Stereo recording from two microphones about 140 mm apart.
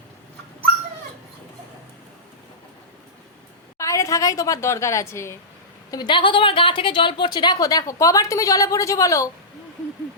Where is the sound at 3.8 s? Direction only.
20° left (ahead or behind).